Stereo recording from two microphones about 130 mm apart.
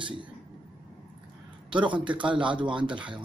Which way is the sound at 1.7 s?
40° right (ahead or behind).